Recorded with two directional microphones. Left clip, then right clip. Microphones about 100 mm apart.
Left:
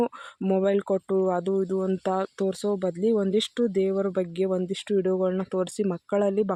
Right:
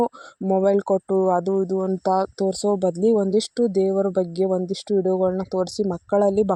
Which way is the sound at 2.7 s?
40° right (ahead or behind).